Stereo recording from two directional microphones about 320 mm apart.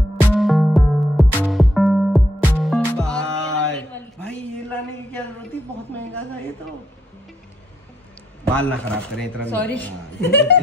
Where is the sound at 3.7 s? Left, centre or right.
Centre.